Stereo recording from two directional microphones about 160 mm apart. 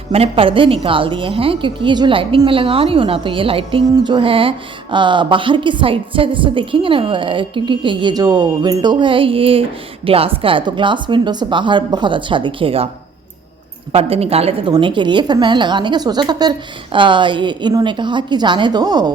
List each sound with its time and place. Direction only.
0.1 s speech: 35° right (ahead or behind)
13.9 s a woman's voice: 40° right (ahead or behind)